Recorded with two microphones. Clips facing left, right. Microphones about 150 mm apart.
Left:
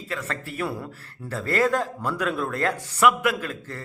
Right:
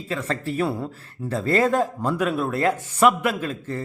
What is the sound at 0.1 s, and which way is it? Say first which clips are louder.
A man's voice: right 6 dB; 30° right (ahead or behind).